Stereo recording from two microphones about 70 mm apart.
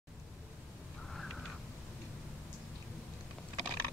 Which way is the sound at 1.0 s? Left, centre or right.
Centre.